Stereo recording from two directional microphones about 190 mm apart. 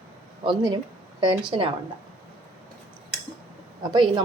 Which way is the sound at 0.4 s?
25° right (ahead or behind).